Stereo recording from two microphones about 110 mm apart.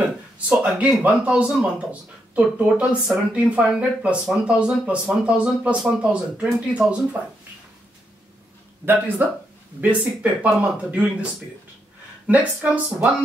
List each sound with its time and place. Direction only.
0.5 s speech: 10° right (ahead or behind)
8.8 s speech: 15° right (ahead or behind)
12.3 s speech: 15° right (ahead or behind)